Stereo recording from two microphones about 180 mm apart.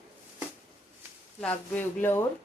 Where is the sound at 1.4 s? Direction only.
10° left (ahead or behind).